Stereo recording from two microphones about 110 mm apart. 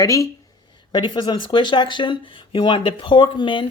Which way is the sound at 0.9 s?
45° left (ahead or behind).